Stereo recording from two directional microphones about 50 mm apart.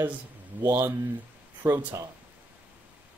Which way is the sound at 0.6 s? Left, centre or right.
Right.